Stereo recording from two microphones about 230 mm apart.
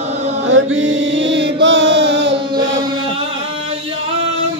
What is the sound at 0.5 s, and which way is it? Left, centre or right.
Chant, right.